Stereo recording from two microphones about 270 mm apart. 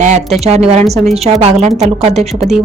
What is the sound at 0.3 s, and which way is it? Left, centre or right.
A woman's voice, right.